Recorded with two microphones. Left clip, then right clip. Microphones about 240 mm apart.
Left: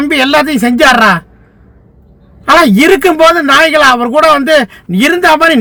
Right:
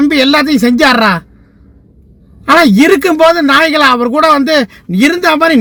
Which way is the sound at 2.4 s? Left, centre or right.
Left.